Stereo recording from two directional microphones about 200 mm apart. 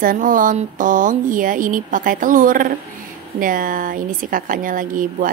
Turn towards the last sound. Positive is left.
turn(degrees=-40)  # may be behind; listen again after turning